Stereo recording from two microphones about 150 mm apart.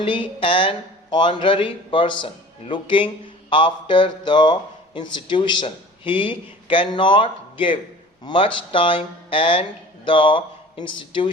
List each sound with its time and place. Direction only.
0.0 s speech: 35° left (ahead or behind)